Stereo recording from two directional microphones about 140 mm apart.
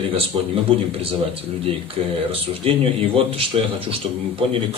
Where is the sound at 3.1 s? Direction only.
40° right (ahead or behind).